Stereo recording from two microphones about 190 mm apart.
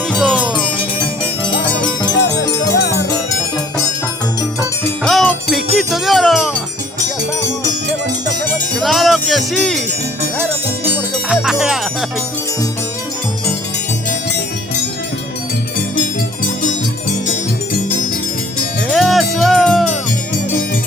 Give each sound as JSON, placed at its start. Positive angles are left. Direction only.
{"t": 0.1, "sound": "music", "side_deg": 0}
{"t": 1.5, "sound": "music", "side_deg": 25}
{"t": 5.0, "sound": "music", "side_deg": 0}
{"t": 8.8, "sound": "music", "side_deg": 0}
{"t": 10.9, "sound": "music", "side_deg": 0}
{"t": 18.9, "sound": "music", "side_deg": 0}